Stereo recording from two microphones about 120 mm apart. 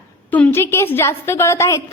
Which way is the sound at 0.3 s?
15° left (ahead or behind).